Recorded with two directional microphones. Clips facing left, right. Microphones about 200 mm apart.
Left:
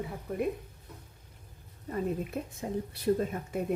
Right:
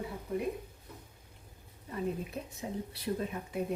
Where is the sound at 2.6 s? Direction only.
50° left (ahead or behind).